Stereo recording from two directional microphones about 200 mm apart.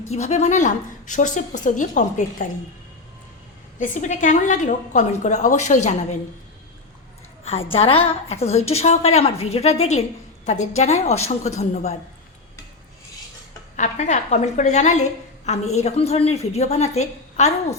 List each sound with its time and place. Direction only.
0.1 s a woman's voice: 35° left (ahead or behind)
3.8 s a woman's voice: 40° left (ahead or behind)
7.4 s a woman's voice: 30° left (ahead or behind)
13.7 s a woman's voice: 35° left (ahead or behind)